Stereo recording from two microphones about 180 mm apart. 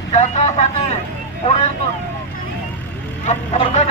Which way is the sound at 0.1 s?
40° left (ahead or behind).